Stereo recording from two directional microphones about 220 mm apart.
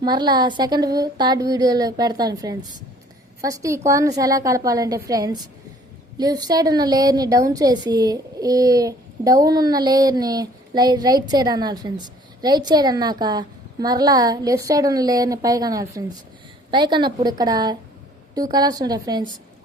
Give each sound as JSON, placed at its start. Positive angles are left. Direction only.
{"t": 0.0, "sound": "a woman's voice", "side_deg": -20}